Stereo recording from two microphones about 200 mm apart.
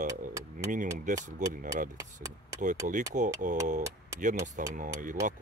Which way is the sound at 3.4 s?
40° right (ahead or behind).